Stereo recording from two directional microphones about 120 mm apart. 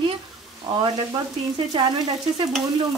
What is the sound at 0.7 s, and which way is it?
Frying, 30° right (ahead or behind).